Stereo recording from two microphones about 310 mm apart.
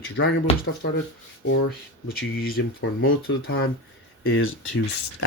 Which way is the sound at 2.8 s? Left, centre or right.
Left.